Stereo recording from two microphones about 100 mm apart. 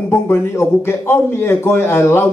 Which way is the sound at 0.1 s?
25° left (ahead or behind).